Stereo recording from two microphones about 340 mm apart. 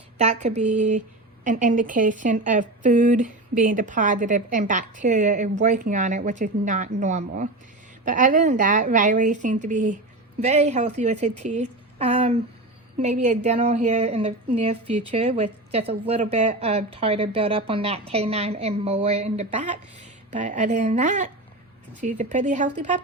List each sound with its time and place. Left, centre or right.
0.2 s a woman's voice: centre